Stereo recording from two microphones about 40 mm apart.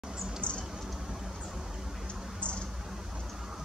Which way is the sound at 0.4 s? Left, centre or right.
Left.